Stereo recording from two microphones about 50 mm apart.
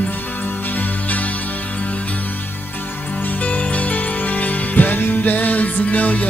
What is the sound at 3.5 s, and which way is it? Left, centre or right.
Music, left.